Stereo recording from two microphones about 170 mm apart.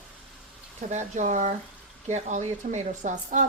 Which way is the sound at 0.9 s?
45° right (ahead or behind).